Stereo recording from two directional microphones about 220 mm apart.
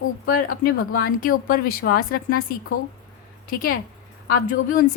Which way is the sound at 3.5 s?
40° left (ahead or behind).